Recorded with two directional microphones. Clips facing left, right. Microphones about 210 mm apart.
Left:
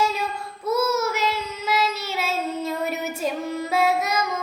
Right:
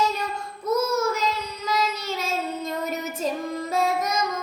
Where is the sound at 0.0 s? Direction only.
5° left (ahead or behind).